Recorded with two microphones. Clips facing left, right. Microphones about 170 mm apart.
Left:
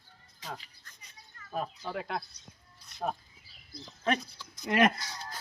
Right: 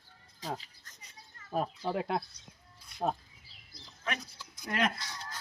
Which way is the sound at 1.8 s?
30° right (ahead or behind).